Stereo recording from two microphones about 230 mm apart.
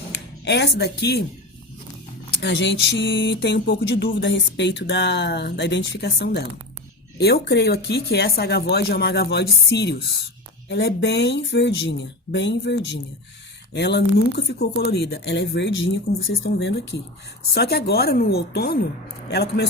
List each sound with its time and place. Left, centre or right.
0.1 s speech: left
2.4 s speech: left